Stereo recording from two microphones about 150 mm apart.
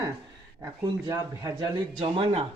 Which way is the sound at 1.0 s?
25° right (ahead or behind).